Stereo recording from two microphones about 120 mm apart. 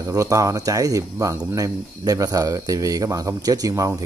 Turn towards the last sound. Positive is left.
turn(degrees=-30)  # may be behind; listen again after turning